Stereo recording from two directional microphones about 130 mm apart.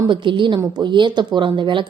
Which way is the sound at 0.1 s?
40° right (ahead or behind).